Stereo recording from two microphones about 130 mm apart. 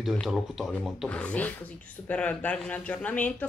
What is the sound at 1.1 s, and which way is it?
Speech, 10° left (ahead or behind).